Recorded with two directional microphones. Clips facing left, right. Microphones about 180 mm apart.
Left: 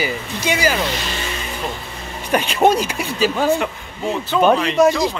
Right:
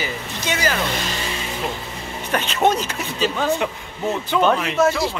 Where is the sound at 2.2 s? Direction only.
10° left (ahead or behind).